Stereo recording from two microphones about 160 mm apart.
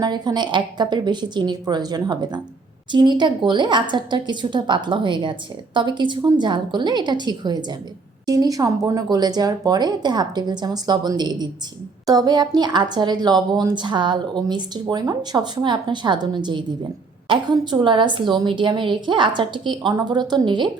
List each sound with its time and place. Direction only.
0.0 s a woman's voice: 25° right (ahead or behind)